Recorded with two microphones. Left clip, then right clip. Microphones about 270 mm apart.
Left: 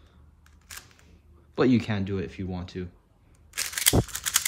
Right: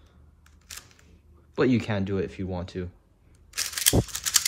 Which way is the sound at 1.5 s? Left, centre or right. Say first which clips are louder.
Even; centre.